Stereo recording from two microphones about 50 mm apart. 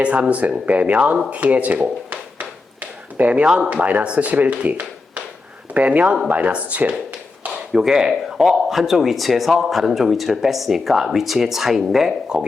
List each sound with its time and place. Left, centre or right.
0.0 s speech: right
3.4 s speech: centre
3.7 s speech: right
7.7 s speech: centre